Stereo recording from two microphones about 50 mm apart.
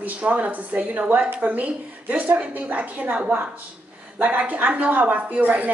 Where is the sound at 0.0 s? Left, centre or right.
Right.